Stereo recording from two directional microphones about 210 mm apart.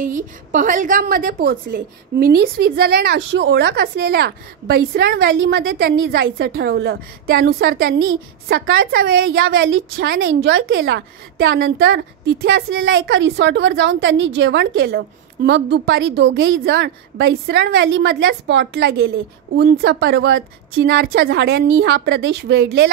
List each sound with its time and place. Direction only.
0.0 s a woman's voice: 40° right (ahead or behind)
8.5 s a woman's voice: 60° right (ahead or behind)
9.1 s a woman's voice: 70° right (ahead or behind)
9.9 s a woman's voice: 55° right (ahead or behind)